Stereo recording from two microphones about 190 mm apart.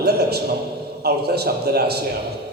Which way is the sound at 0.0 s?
60° right (ahead or behind).